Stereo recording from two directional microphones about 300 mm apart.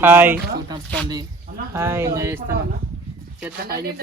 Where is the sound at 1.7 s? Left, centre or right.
Centre.